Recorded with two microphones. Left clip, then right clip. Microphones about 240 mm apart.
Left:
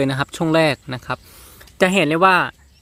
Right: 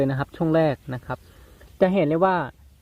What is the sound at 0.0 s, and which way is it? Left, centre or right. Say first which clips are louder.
Speech: left 4 dB; centre.